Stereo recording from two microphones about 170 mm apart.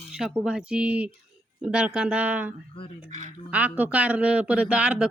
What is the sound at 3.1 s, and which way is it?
Speech, 45° right (ahead or behind).